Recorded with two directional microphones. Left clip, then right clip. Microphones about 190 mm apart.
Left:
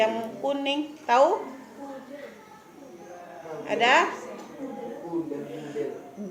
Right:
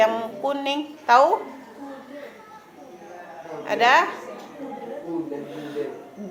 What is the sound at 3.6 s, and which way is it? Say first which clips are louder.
Speech: right 3 dB; 5° left (ahead or behind).